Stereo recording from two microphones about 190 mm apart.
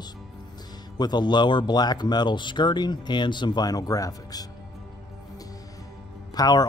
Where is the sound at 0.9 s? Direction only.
20° left (ahead or behind).